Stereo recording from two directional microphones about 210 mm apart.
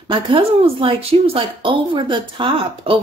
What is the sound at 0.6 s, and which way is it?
Speech, 25° right (ahead or behind).